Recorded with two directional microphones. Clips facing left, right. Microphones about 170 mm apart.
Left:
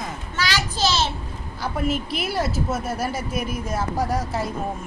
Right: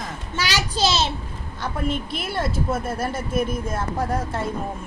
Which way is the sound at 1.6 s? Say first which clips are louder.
Left 1 dB; 5° left (ahead or behind).